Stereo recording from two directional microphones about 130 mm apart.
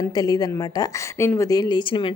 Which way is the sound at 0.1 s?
30° left (ahead or behind).